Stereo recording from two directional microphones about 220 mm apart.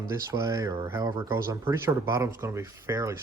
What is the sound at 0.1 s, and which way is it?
Speech, 15° right (ahead or behind).